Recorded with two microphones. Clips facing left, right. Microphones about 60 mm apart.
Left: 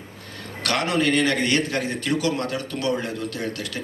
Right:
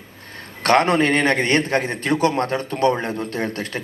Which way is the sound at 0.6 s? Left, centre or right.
Right.